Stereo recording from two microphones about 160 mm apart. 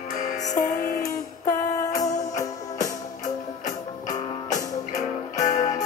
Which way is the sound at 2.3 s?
20° left (ahead or behind).